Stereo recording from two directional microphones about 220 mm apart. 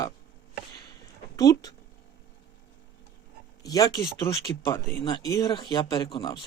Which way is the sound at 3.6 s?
15° left (ahead or behind).